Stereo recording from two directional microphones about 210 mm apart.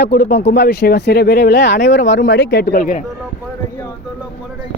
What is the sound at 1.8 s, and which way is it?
Speech, 35° left (ahead or behind).